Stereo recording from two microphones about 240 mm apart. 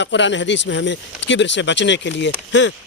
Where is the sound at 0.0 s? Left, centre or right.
Left.